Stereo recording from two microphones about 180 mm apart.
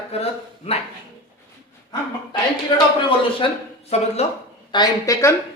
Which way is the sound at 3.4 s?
30° left (ahead or behind).